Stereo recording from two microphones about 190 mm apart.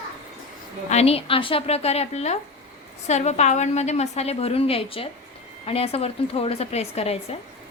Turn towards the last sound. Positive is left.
turn(degrees=35)  # may be behind; listen again after turning